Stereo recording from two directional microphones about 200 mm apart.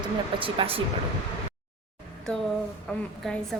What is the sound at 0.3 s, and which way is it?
Speech, 25° right (ahead or behind).